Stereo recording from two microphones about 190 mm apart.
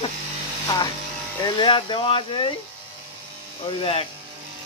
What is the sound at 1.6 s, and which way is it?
Speech, 25° left (ahead or behind).